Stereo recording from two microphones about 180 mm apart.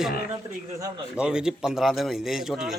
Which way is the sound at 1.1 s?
5° right (ahead or behind).